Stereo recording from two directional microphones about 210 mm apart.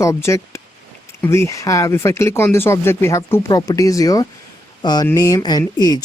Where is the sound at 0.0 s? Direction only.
15° left (ahead or behind).